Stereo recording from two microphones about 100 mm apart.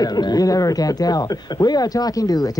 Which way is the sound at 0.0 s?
40° left (ahead or behind).